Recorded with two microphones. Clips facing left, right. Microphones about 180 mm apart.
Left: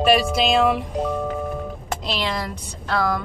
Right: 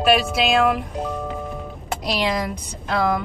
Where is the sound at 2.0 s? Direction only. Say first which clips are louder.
Right 4 dB; 15° right (ahead or behind).